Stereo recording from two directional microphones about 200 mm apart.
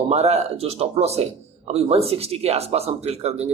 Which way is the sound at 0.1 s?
30° right (ahead or behind).